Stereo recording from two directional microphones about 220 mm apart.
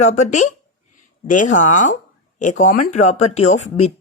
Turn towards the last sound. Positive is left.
turn(degrees=30)  # may be behind; listen again after turning